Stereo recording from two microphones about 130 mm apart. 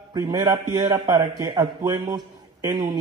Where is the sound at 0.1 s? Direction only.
30° right (ahead or behind).